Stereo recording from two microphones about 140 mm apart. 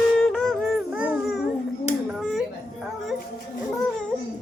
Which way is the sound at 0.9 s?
10° right (ahead or behind).